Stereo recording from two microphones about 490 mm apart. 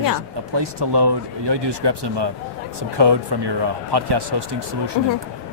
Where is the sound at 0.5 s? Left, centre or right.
Right.